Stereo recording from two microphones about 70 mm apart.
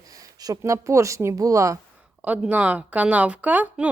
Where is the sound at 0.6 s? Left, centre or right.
Right.